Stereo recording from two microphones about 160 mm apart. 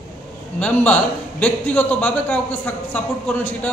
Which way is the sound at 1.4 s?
10° left (ahead or behind).